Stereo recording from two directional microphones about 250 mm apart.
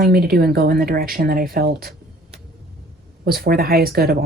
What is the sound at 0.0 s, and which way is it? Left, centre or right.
Speech, right.